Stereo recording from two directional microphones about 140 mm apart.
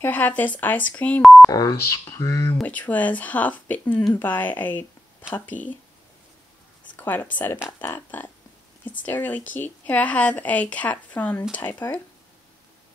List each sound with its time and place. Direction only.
0.0 s speech: 10° left (ahead or behind)
1.2 s speech: centre (ahead or behind)
1.5 s speech: 25° left (ahead or behind)
2.6 s speech: 10° left (ahead or behind)
7.0 s speech: 15° left (ahead or behind)